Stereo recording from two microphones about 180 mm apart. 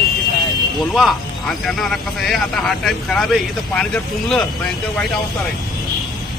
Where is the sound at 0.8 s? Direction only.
Centre (ahead or behind).